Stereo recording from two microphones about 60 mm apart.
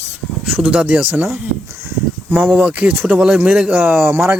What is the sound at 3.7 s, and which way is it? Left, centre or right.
Speech, right.